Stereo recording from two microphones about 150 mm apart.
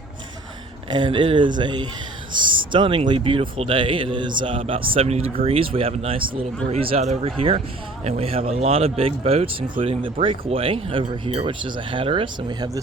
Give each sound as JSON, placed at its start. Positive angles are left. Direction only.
{"t": 0.9, "sound": "speech", "side_deg": -30}